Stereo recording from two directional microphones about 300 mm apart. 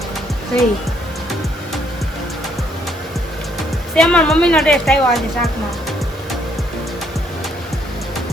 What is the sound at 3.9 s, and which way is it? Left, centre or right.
A woman's voice, centre.